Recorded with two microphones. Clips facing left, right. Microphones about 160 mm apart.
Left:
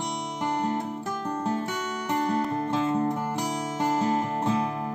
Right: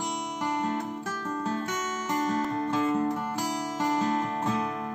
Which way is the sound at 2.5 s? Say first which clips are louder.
Left 1 dB; 25° left (ahead or behind).